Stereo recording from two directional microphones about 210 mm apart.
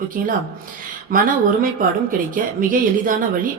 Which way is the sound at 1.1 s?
40° right (ahead or behind).